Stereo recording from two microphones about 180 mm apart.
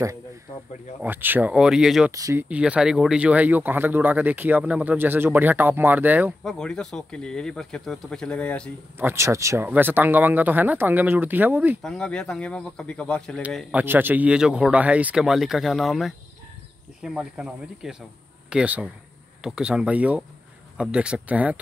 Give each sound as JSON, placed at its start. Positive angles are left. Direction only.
{"t": 1.0, "sound": "speech", "side_deg": -10}
{"t": 2.1, "sound": "speech", "side_deg": -20}
{"t": 2.4, "sound": "speech", "side_deg": -5}
{"t": 6.4, "sound": "speech", "side_deg": 5}
{"t": 8.9, "sound": "speech", "side_deg": -15}
{"t": 11.8, "sound": "speech", "side_deg": 5}
{"t": 13.7, "sound": "speech", "side_deg": -10}